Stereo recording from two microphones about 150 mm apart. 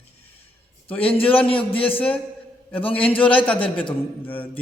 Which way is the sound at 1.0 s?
40° left (ahead or behind).